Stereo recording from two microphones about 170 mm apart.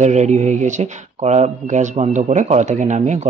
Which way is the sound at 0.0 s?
45° right (ahead or behind).